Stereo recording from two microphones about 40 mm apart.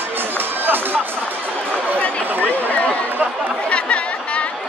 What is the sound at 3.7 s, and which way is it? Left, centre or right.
Chatter, left.